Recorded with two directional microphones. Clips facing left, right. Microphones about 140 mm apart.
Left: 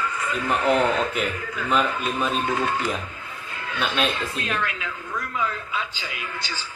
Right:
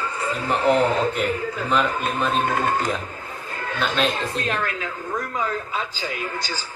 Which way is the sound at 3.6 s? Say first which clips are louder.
Right 2 dB; 45° right (ahead or behind).